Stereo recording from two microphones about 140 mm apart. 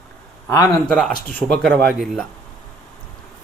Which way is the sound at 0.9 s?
5° left (ahead or behind).